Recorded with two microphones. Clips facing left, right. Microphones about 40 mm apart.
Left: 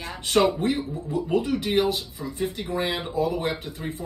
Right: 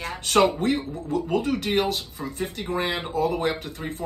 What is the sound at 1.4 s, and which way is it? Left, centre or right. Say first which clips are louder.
Speech: left 1 dB; right.